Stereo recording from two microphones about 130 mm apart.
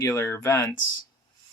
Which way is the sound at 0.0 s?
20° left (ahead or behind).